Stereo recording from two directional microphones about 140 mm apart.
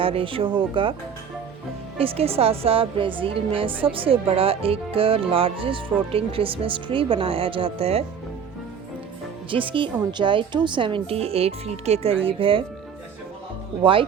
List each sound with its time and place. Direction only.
0.0 s a woman's voice: 40° right (ahead or behind)
2.0 s a woman's voice: 45° right (ahead or behind)
9.5 s a woman's voice: 40° right (ahead or behind)